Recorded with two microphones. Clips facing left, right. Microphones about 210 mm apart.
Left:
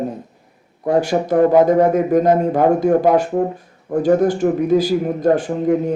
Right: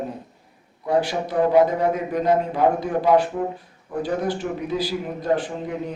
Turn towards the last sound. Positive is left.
turn(degrees=45)  # may be behind; listen again after turning